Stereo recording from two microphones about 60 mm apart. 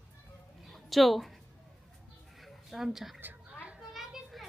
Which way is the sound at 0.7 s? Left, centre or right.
Centre.